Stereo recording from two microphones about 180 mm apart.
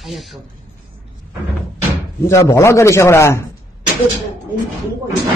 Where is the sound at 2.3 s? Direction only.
15° left (ahead or behind).